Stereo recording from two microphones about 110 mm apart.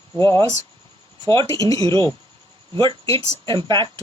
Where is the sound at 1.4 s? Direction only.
30° left (ahead or behind).